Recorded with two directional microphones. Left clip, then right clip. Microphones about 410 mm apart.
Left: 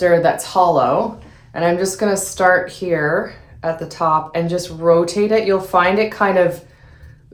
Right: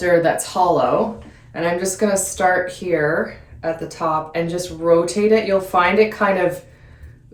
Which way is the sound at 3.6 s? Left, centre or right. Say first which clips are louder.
Left 3 dB; centre.